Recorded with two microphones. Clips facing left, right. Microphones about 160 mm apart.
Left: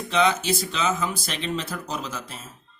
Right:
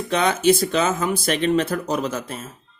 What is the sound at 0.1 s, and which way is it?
Speech, 50° right (ahead or behind).